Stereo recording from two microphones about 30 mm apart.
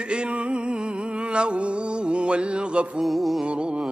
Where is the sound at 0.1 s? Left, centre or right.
Right.